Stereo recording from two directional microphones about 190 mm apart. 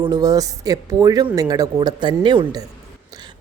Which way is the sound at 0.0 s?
20° right (ahead or behind).